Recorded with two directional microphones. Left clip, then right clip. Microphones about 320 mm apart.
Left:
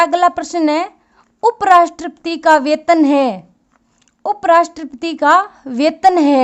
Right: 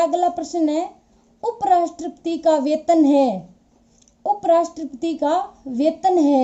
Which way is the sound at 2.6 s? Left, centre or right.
Left.